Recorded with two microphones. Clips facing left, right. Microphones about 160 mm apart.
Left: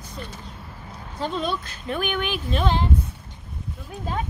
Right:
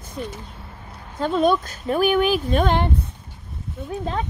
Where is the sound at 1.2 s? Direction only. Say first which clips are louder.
Right 8 dB; 50° right (ahead or behind).